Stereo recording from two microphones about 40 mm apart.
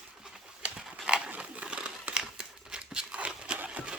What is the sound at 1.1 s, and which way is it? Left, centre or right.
Horse, right.